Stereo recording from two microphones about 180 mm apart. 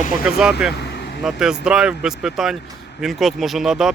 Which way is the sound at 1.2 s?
5° right (ahead or behind).